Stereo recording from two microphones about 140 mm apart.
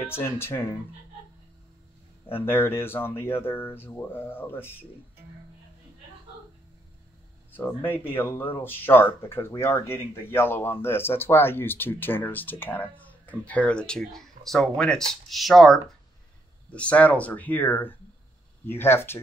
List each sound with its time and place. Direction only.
0.1 s speech: 15° left (ahead or behind)
2.3 s speech: 15° left (ahead or behind)
7.5 s speech: 15° left (ahead or behind)